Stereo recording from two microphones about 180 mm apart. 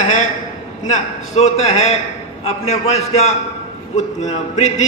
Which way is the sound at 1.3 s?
35° left (ahead or behind).